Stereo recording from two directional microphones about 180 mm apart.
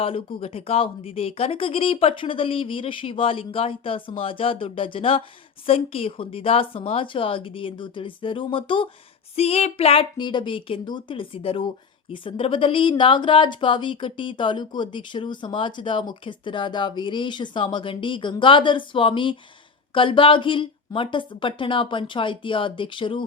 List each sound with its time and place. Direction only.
0.0 s speech: 30° left (ahead or behind)